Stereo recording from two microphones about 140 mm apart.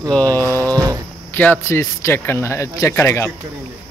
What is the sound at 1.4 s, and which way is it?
Speech, 15° left (ahead or behind).